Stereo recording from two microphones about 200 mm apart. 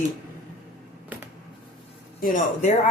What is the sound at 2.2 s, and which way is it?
Speech, 45° left (ahead or behind).